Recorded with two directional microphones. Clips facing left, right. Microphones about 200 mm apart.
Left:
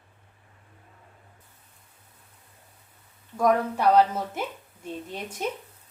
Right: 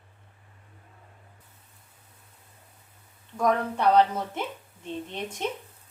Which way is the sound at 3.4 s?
10° left (ahead or behind).